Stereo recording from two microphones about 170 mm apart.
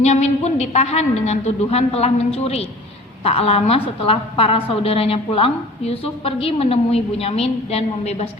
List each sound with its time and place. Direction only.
0.0 s a woman's voice: 40° left (ahead or behind)